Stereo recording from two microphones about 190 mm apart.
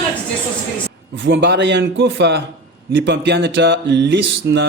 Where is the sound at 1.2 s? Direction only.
75° right (ahead or behind).